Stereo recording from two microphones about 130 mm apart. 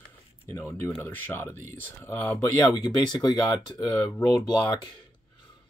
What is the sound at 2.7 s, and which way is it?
Speech, 35° left (ahead or behind).